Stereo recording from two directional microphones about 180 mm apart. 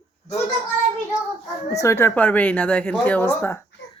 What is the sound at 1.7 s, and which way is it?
Speech, 15° left (ahead or behind).